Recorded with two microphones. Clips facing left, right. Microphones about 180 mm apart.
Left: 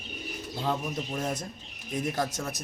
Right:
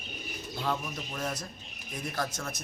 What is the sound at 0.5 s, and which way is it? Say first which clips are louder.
Speech: left 3 dB; 25° left (ahead or behind).